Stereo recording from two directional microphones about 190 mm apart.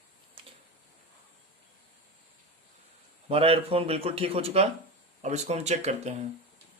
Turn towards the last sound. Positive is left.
turn(degrees=-35)  # may be behind; listen again after turning